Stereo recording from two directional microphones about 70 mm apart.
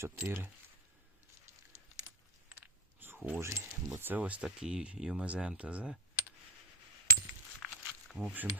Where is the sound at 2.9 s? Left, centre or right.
Right.